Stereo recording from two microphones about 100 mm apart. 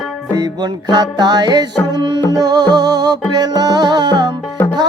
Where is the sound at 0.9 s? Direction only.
40° right (ahead or behind).